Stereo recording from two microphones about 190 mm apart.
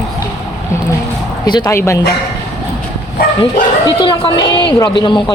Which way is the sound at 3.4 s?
25° left (ahead or behind).